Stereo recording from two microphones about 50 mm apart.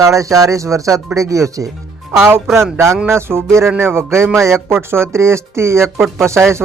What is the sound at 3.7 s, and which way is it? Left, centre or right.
Speech, right.